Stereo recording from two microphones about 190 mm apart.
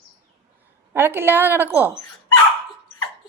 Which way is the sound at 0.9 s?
10° right (ahead or behind).